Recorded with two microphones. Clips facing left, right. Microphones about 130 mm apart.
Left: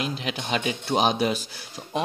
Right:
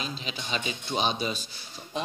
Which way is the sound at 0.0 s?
70° left (ahead or behind).